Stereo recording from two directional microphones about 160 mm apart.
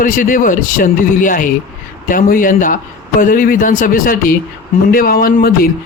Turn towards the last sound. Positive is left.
turn(degrees=65)  # may be behind; listen again after turning